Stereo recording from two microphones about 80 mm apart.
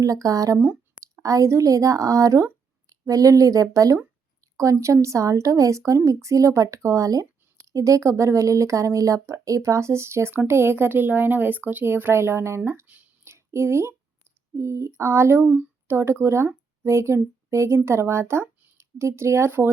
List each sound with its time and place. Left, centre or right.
0.0 s a woman's voice: right
13.2 s a sound: right
14.6 s a woman's voice: right